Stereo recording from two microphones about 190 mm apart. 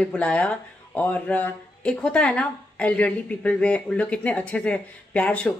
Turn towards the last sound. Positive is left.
turn(degrees=5)  # may be behind; listen again after turning